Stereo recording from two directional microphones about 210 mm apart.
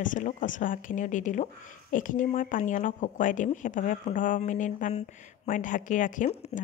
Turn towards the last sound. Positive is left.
turn(degrees=35)  # may be behind; listen again after turning